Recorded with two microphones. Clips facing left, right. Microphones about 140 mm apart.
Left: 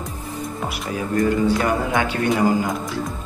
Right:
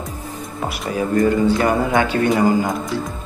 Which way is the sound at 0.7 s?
Centre (ahead or behind).